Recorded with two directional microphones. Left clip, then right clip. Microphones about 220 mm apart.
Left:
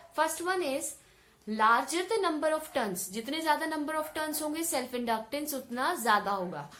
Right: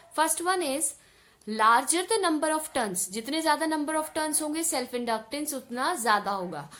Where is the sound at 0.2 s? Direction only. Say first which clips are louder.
Right 3 dB; 40° right (ahead or behind).